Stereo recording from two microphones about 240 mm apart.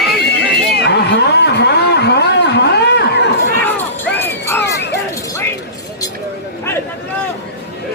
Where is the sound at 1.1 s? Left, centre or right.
Left.